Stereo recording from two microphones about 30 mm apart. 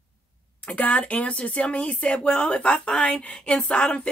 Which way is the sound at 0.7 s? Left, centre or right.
Left.